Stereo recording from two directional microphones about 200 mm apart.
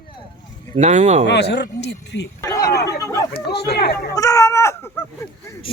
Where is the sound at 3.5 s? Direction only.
55° left (ahead or behind).